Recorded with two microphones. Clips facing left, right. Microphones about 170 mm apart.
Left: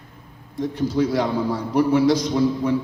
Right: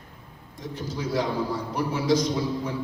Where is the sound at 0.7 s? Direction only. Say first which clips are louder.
Left 7 dB; 60° left (ahead or behind).